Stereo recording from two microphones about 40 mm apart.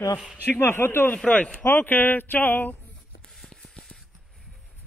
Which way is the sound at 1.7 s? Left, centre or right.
Left.